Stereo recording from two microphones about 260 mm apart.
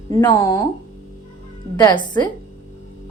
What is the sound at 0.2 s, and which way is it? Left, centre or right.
Speech, centre.